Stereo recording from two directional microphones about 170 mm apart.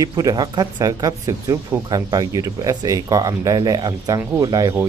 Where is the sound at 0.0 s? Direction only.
20° right (ahead or behind).